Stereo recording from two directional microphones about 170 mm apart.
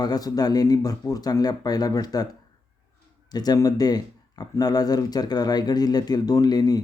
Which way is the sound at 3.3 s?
25° left (ahead or behind).